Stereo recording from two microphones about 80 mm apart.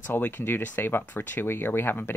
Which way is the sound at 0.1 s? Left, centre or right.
Left.